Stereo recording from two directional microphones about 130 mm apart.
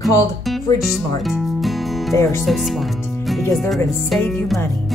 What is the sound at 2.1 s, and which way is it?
Speech, 20° left (ahead or behind).